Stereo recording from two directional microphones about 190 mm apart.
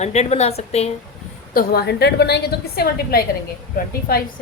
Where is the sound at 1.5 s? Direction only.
55° left (ahead or behind).